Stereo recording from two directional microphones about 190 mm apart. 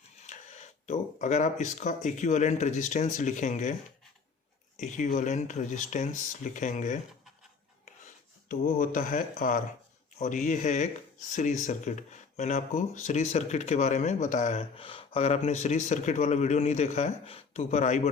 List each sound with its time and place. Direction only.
0.2 s speech: 35° left (ahead or behind)
4.8 s speech: 40° left (ahead or behind)
8.4 s speech: 45° left (ahead or behind)